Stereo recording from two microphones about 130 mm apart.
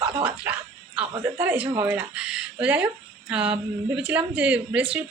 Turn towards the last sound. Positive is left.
turn(degrees=-10)  # may be behind; listen again after turning